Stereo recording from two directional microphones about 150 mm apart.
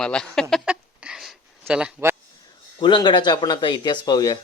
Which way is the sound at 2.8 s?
30° left (ahead or behind).